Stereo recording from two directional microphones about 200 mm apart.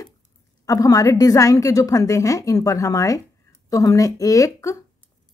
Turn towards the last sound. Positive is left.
turn(degrees=15)  # may be behind; listen again after turning